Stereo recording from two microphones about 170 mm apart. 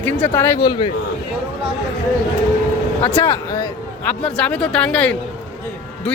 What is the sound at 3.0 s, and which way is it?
Speech, 20° left (ahead or behind).